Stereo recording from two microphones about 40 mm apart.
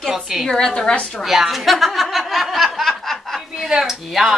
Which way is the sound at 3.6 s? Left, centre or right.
Centre.